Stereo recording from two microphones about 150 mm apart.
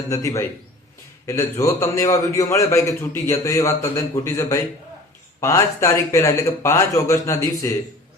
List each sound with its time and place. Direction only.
0.1 s a man's voice: 20° left (ahead or behind)